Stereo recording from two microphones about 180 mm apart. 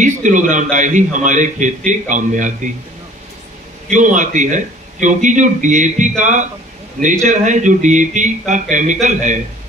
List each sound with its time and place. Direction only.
0.0 s a man's voice: 45° right (ahead or behind)
3.9 s a man's voice: 45° right (ahead or behind)